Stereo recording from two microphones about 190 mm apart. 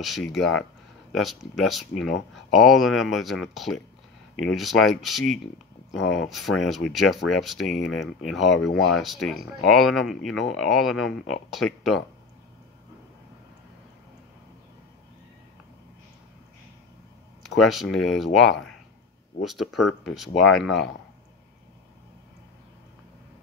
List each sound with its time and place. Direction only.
0.0 s speech: centre (ahead or behind)
17.6 s speech: centre (ahead or behind)